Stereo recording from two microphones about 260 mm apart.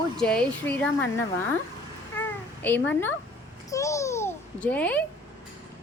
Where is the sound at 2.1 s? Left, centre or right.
Centre.